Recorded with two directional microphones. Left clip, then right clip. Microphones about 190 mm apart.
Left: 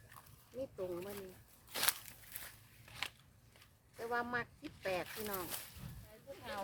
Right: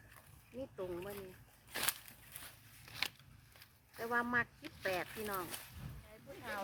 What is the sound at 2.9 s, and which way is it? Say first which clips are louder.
Scissors: right 3 dB; 40° right (ahead or behind).